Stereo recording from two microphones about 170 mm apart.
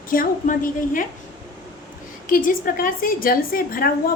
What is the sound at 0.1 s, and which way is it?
Speech, 55° left (ahead or behind).